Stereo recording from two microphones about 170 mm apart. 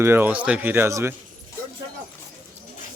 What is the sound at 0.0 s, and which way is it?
Speech, 15° right (ahead or behind).